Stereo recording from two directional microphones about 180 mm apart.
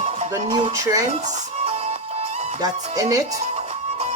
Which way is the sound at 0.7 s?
20° right (ahead or behind).